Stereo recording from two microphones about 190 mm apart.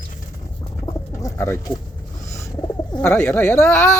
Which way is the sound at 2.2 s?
15° left (ahead or behind).